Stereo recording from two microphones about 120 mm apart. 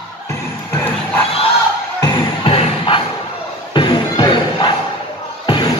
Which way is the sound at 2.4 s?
50° left (ahead or behind).